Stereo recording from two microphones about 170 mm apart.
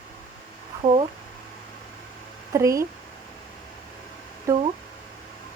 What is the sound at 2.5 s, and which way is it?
Speech, 20° right (ahead or behind).